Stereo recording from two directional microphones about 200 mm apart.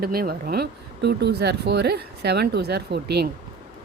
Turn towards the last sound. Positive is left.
turn(degrees=-55)  # may be behind; listen again after turning